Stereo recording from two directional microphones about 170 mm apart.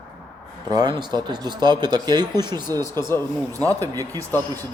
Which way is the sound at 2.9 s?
15° left (ahead or behind).